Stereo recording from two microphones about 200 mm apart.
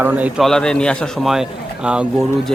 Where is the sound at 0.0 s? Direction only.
10° right (ahead or behind).